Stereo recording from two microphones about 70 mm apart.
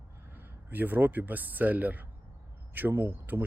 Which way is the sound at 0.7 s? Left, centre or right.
Right.